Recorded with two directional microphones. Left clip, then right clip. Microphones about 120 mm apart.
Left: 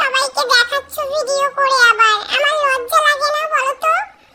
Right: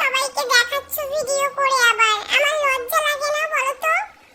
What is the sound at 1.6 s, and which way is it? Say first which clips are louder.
Child singing: left 5 dB; 20° left (ahead or behind).